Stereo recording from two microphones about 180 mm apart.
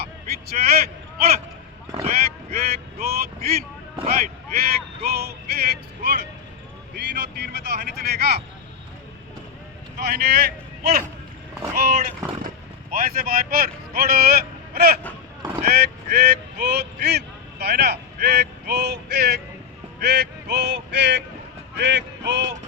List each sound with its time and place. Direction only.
0.5 s a man's voice: 55° right (ahead or behind)
2.0 s a sound: 55° right (ahead or behind)
4.1 s speech: 50° right (ahead or behind)
10.0 s speech: 65° right (ahead or behind)
11.7 s speech: 55° right (ahead or behind); by 19.4 s 70° right (ahead or behind)
20.0 s a sound: 65° right (ahead or behind)